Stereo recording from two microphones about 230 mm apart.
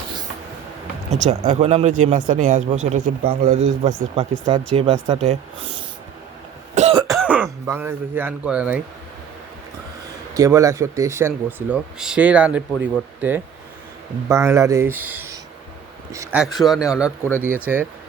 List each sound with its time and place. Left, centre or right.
1.1 s speech: right
6.7 s cough: right
7.1 s speech: centre
10.3 s speech: centre